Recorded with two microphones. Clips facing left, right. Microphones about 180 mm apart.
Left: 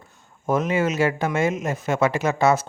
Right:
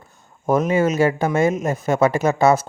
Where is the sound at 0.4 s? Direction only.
40° right (ahead or behind).